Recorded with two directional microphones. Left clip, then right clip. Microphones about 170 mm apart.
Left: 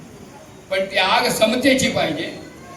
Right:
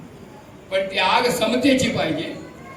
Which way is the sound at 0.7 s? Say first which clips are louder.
Left 1 dB; 45° left (ahead or behind).